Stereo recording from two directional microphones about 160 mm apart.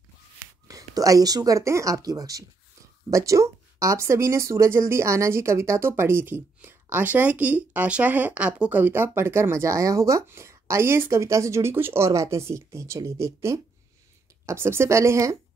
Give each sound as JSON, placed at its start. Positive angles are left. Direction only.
{"t": 0.4, "sound": "speech", "side_deg": -20}